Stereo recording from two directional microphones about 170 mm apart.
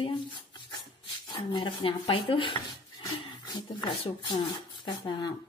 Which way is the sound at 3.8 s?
30° left (ahead or behind).